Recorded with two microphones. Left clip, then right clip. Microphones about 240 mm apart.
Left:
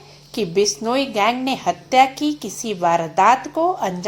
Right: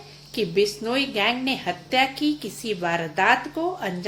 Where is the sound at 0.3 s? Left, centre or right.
Left.